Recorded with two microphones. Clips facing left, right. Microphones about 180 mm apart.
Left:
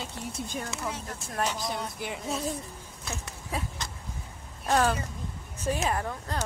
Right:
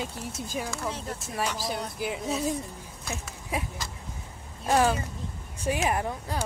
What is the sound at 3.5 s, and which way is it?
Speech, 15° right (ahead or behind).